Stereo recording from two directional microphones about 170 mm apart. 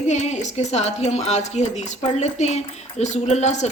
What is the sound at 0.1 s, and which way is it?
A woman's voice, 40° left (ahead or behind).